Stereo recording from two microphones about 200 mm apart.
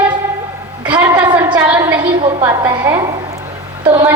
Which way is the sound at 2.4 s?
20° right (ahead or behind).